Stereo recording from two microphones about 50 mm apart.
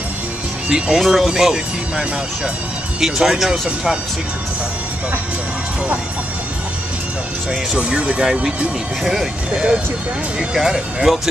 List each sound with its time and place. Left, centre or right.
0.7 s speech: centre
0.9 s speech: centre
7.7 s speech: right
9.0 s speech: centre
10.5 s speech: centre